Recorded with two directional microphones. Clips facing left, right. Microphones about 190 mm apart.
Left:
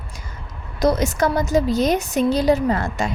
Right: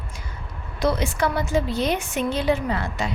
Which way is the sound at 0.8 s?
40° left (ahead or behind).